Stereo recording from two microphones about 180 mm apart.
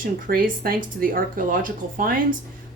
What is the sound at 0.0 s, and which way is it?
Speech, 50° right (ahead or behind).